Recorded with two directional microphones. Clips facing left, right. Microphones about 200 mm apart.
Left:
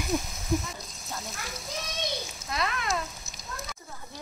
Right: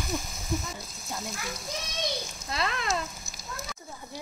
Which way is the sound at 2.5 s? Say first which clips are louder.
Even; 30° right (ahead or behind).